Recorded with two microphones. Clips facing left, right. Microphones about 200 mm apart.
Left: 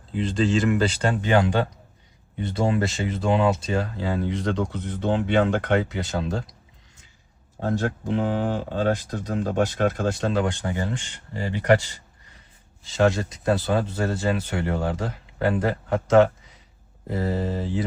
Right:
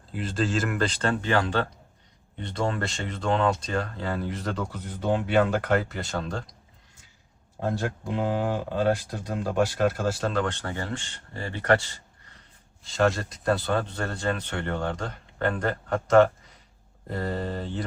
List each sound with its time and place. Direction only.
0.1 s speech: 5° right (ahead or behind)
1.0 s speech: 15° left (ahead or behind)
2.4 s speech: 5° left (ahead or behind)
7.6 s speech: 10° right (ahead or behind)
10.4 s speech: 15° left (ahead or behind)
12.8 s speech: centre (ahead or behind)